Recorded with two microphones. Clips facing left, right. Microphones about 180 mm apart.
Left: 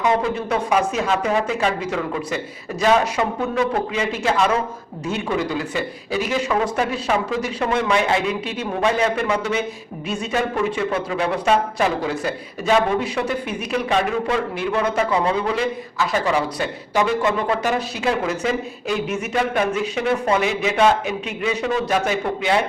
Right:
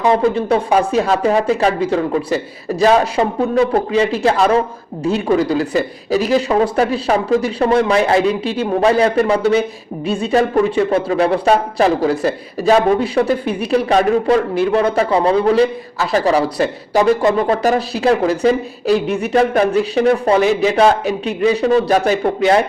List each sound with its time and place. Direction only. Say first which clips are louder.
0.3 s speech: right 6 dB; 30° right (ahead or behind)